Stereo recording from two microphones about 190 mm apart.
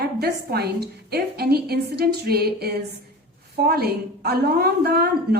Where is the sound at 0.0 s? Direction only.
60° right (ahead or behind).